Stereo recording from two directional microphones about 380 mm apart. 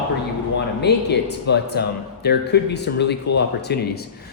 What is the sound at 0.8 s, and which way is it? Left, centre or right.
Speech, left.